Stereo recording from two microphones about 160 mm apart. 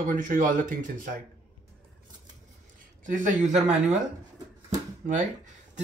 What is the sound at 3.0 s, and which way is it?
Speech, 50° right (ahead or behind).